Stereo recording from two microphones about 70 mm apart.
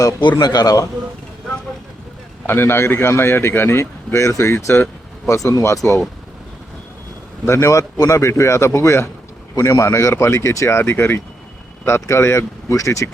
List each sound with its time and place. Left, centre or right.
0.2 s a man's voice: left
2.5 s speech: left
5.4 s speech: left
7.4 s speech: left